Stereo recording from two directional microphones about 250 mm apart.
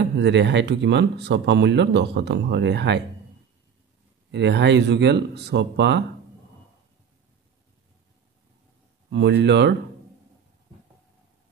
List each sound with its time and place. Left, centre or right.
0.2 s speech: right
4.3 s speech: right
9.1 s speech: right